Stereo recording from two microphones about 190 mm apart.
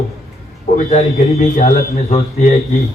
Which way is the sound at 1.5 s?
45° left (ahead or behind).